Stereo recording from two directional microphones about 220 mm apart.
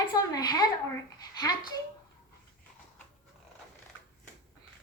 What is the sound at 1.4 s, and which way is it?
Speech, 20° left (ahead or behind).